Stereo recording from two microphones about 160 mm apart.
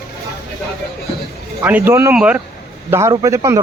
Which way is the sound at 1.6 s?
15° right (ahead or behind).